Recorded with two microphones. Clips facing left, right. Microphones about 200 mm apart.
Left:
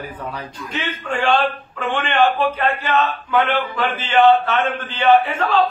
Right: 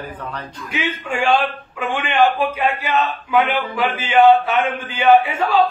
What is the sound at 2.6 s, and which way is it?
Speech, 10° right (ahead or behind).